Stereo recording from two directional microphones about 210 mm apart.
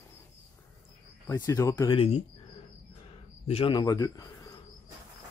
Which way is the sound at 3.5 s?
25° left (ahead or behind).